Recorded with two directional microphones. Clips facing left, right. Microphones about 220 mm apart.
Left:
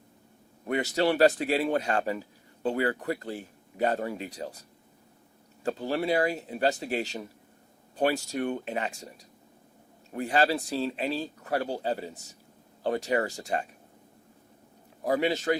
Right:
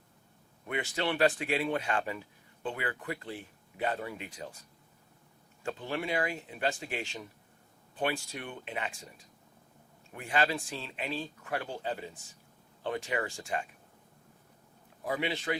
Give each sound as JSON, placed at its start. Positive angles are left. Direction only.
{"t": 0.7, "sound": "speech", "side_deg": 40}
{"t": 5.6, "sound": "speech", "side_deg": 40}
{"t": 15.0, "sound": "speech", "side_deg": 40}